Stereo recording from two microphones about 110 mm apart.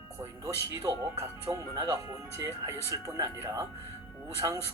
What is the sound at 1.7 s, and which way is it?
Speech, 35° right (ahead or behind).